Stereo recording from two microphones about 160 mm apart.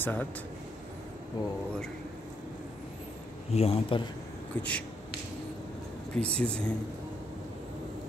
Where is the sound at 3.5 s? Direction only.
35° left (ahead or behind).